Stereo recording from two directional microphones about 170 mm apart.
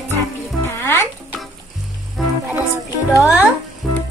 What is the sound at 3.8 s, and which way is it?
Frying, centre (ahead or behind).